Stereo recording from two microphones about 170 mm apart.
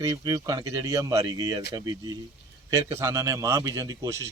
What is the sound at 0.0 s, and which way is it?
A man's voice, 20° right (ahead or behind).